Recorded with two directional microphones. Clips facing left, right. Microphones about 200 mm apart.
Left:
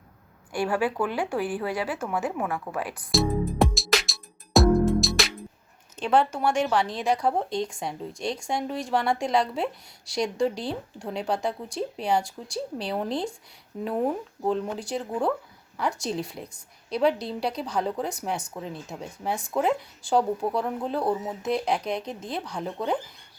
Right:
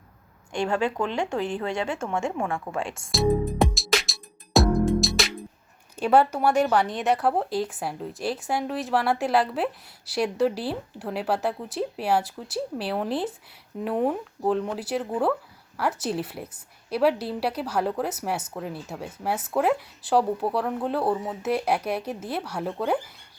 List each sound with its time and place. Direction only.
0.5 s speech: 5° left (ahead or behind)
2.7 s speech: 10° right (ahead or behind)
3.1 s music: centre (ahead or behind)
6.0 s speech: 5° right (ahead or behind)